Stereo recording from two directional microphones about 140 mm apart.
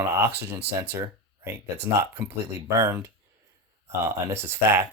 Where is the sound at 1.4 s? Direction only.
15° right (ahead or behind).